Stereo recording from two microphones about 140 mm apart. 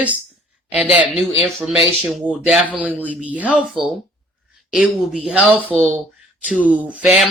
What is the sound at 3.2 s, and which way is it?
Speech, 10° right (ahead or behind).